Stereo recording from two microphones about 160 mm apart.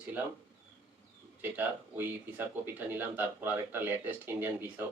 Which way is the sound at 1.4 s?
10° right (ahead or behind).